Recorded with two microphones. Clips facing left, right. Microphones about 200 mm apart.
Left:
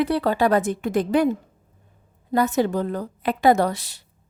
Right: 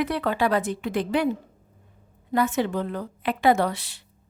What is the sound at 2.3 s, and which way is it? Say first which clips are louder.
A woman's voice: left 3 dB; 40° left (ahead or behind).